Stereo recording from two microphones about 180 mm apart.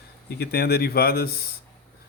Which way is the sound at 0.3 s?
60° left (ahead or behind).